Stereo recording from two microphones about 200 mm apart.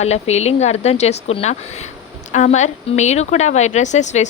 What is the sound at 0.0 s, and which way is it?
A woman's voice, 35° left (ahead or behind).